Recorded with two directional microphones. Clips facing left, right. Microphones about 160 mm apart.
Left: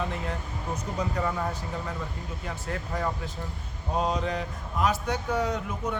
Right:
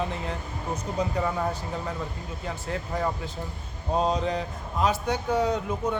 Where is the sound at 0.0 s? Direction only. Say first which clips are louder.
Right 1 dB; 25° right (ahead or behind).